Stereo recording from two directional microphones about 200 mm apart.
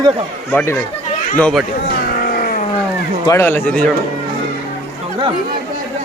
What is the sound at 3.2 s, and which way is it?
Speech, 10° left (ahead or behind).